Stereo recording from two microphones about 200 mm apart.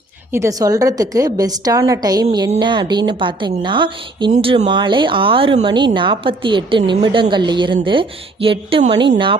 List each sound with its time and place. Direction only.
0.3 s a woman's voice: 15° right (ahead or behind)